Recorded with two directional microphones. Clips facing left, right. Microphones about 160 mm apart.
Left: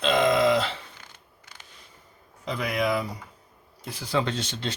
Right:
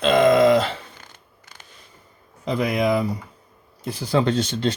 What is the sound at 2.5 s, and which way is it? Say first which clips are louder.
Speech: right 6 dB; 40° right (ahead or behind).